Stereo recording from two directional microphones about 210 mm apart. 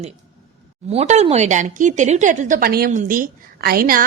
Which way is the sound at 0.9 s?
30° right (ahead or behind).